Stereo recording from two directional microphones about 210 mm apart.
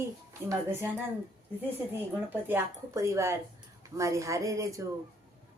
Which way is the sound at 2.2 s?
10° right (ahead or behind).